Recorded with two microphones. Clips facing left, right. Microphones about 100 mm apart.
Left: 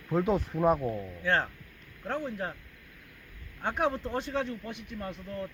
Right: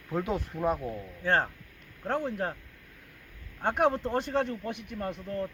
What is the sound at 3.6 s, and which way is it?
Speech, 55° right (ahead or behind).